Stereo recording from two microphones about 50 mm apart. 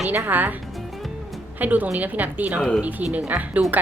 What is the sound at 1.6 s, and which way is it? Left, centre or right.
A woman's voice, right.